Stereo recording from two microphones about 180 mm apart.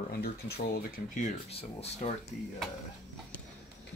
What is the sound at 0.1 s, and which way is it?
Speech, 60° left (ahead or behind).